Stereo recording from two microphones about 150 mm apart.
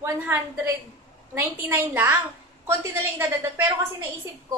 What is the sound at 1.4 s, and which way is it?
A woman's voice, 15° right (ahead or behind).